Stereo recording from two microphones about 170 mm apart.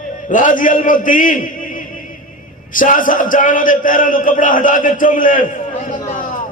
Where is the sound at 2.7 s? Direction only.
50° left (ahead or behind).